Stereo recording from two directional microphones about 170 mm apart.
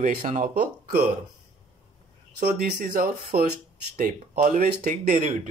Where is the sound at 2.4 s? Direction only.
60° right (ahead or behind).